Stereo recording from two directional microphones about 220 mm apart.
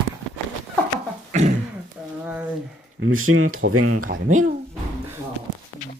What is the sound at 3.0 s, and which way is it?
Speech, 70° right (ahead or behind).